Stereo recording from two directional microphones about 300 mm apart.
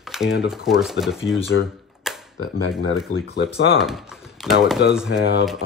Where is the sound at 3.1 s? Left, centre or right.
Left.